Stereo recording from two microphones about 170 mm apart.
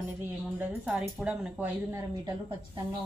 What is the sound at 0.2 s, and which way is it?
A woman's voice, 10° right (ahead or behind).